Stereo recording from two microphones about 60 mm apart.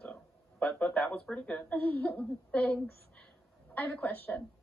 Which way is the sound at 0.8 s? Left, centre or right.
Left.